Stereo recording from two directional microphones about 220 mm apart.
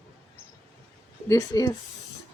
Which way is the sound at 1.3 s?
15° left (ahead or behind).